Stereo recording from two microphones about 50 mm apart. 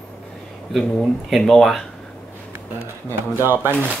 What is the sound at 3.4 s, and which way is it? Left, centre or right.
Speech, right.